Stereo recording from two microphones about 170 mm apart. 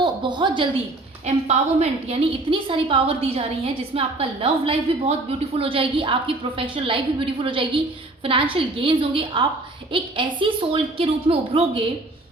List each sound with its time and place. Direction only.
0.0 s a woman's voice: 30° right (ahead or behind)
1.2 s a woman's voice: 40° right (ahead or behind)